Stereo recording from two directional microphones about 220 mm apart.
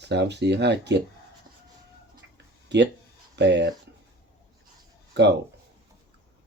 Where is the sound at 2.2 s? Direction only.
55° right (ahead or behind).